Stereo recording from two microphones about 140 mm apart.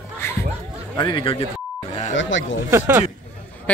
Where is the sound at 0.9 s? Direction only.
35° left (ahead or behind).